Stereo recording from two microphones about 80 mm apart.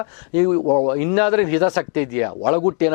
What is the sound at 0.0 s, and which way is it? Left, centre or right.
A man's voice, centre.